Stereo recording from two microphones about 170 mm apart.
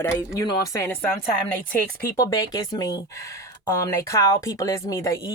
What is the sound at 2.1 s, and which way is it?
Speech, 20° left (ahead or behind).